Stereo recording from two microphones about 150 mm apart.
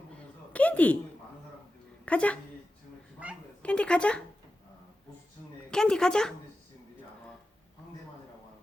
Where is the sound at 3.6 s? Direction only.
5° left (ahead or behind).